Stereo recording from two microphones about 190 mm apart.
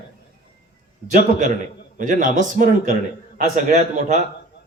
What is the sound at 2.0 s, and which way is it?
A man's voice, 45° right (ahead or behind).